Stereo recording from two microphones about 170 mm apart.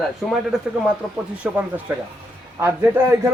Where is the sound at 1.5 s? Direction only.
5° right (ahead or behind).